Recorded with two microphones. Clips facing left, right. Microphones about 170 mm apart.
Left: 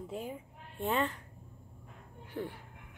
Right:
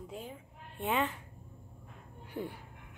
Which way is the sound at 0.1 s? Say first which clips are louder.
Left 4 dB; 5° left (ahead or behind).